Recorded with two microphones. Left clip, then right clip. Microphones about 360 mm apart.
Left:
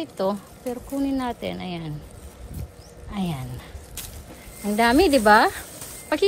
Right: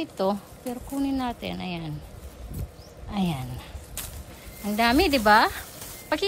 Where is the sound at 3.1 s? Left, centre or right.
Centre.